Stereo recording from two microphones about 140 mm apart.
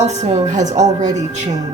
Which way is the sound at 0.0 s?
55° right (ahead or behind).